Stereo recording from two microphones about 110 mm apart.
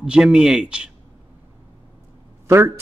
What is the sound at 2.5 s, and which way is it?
Speech, 20° right (ahead or behind).